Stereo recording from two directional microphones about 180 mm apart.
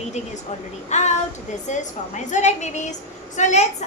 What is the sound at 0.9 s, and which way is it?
A woman's voice, 40° left (ahead or behind).